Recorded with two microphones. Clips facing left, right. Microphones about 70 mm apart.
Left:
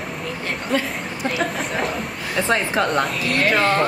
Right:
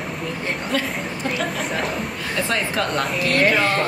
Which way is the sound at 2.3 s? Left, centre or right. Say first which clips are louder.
Left 3 dB; left.